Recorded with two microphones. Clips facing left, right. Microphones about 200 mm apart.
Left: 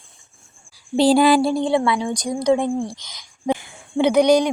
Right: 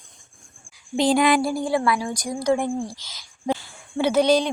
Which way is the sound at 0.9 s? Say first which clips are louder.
Left 4 dB; 35° left (ahead or behind).